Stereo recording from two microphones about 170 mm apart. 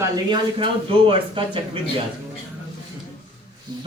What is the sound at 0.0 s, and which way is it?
Speech, 30° right (ahead or behind).